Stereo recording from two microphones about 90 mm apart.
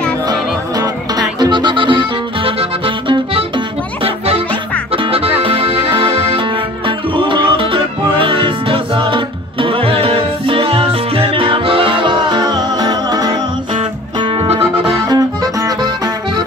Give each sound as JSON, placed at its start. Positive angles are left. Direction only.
{"t": 0.3, "sound": "music", "side_deg": -45}
{"t": 1.4, "sound": "music", "side_deg": -60}
{"t": 4.9, "sound": "music", "side_deg": -90}
{"t": 5.9, "sound": "music", "side_deg": -75}
{"t": 15.0, "sound": "music", "side_deg": -45}